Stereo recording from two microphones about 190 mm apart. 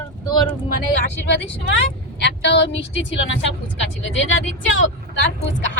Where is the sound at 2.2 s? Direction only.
65° left (ahead or behind).